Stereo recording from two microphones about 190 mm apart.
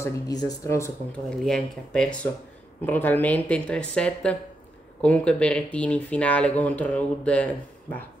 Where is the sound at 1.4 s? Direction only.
5° left (ahead or behind).